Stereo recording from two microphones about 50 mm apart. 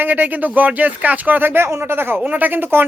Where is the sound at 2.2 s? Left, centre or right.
Right.